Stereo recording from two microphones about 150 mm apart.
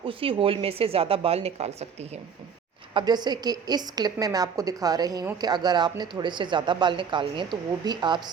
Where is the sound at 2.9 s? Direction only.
30° right (ahead or behind).